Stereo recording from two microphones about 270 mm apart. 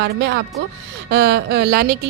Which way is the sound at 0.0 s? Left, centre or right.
Right.